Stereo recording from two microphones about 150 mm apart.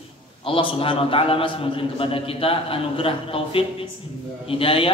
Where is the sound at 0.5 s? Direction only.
35° left (ahead or behind).